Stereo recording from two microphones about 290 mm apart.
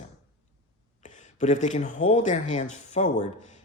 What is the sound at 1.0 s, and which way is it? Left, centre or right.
Speech, left.